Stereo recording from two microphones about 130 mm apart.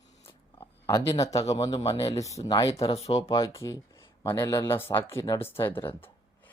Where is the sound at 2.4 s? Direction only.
35° left (ahead or behind).